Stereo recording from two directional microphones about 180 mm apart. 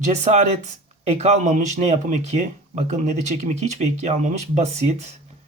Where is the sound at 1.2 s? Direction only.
40° right (ahead or behind).